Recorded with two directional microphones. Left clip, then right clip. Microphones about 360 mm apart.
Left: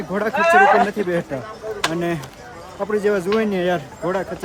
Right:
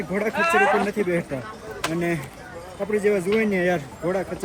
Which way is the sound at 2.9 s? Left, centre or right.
Left.